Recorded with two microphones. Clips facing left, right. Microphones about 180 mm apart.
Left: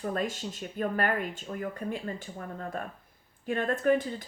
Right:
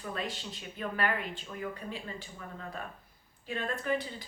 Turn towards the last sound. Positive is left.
turn(degrees=50)  # may be behind; listen again after turning